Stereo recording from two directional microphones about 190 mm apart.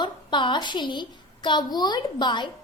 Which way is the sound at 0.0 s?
25° left (ahead or behind).